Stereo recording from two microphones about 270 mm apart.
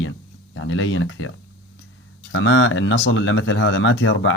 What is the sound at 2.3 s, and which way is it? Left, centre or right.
Speech, left.